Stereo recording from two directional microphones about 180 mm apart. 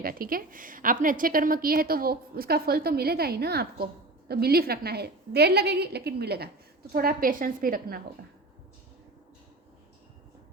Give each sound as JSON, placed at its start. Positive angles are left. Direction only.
{"t": 0.0, "sound": "a woman's voice", "side_deg": -55}